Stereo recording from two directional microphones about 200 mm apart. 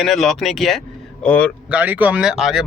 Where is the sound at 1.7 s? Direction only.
10° right (ahead or behind).